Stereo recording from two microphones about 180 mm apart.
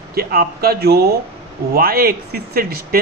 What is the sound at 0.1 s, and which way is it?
Speech, 60° right (ahead or behind).